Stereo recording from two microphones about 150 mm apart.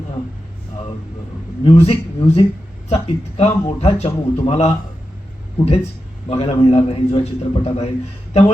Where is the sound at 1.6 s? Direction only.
40° left (ahead or behind).